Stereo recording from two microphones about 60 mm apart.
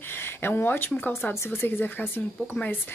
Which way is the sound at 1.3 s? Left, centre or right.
Left.